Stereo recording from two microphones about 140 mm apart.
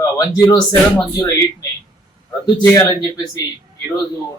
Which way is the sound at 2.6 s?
20° left (ahead or behind).